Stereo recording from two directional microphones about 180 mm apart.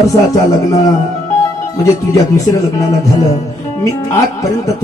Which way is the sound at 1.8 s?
15° left (ahead or behind).